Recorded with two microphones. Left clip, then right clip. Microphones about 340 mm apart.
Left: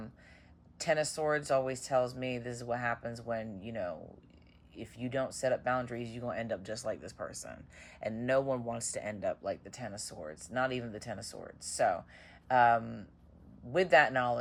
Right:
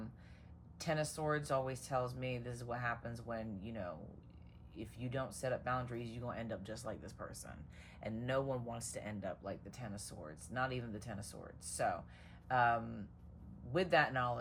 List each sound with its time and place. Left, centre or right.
0.8 s speech: left